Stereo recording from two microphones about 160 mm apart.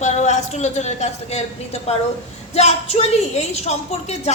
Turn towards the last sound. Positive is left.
turn(degrees=40)  # may be behind; listen again after turning